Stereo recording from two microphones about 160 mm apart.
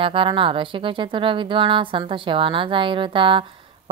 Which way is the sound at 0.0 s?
35° right (ahead or behind).